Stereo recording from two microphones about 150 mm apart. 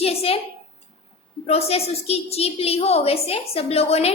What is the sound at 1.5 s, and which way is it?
A woman's voice, 40° left (ahead or behind).